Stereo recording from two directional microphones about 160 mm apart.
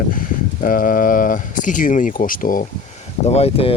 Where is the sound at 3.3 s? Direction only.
40° left (ahead or behind).